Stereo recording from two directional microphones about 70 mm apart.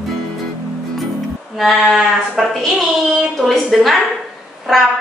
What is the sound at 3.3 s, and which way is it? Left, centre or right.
A woman's voice, centre.